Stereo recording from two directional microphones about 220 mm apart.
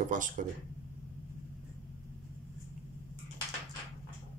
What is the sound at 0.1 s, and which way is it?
Speech, 35° right (ahead or behind).